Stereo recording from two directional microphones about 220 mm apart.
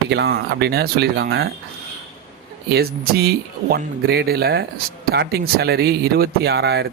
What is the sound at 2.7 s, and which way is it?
Speech, 45° right (ahead or behind).